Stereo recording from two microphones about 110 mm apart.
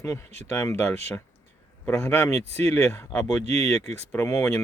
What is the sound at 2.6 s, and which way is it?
Speech, 25° left (ahead or behind).